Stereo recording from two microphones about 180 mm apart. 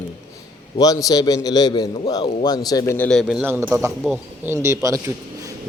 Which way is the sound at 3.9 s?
Centre (ahead or behind).